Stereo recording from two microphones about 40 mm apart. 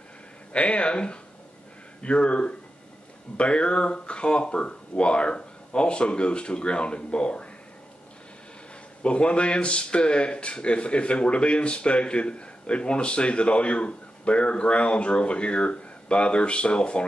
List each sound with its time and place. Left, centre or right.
0.5 s speech: left
9.0 s speech: left